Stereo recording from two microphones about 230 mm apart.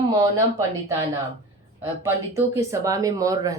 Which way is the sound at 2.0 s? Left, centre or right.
Centre.